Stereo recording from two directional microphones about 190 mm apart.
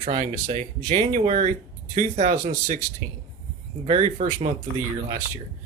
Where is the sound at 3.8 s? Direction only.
35° right (ahead or behind).